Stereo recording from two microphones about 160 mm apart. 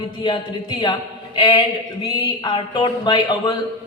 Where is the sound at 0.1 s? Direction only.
30° left (ahead or behind).